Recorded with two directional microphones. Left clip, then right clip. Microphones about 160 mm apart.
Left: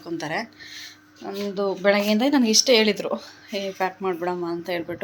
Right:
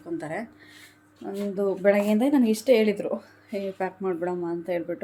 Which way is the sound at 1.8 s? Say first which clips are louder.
Left 2 dB; 10° right (ahead or behind).